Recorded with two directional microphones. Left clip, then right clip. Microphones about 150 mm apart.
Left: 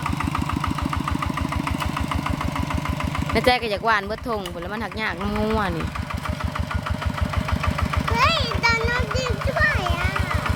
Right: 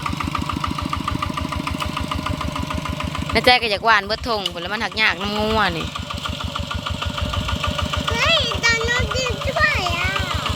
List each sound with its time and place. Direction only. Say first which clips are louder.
3.3 s speech: right 5 dB; 5° left (ahead or behind)
5.3 s speech: right 3 dB; 15° right (ahead or behind)
8.1 s a sound: right 2 dB; centre (ahead or behind)
9.7 s vehicle: right 4 dB; 25° right (ahead or behind)